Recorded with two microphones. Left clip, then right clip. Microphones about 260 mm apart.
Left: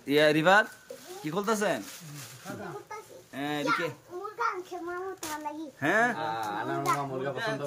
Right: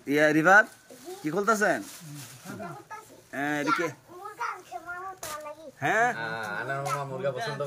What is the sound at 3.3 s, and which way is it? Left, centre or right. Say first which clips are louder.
Speech: right 3 dB; centre.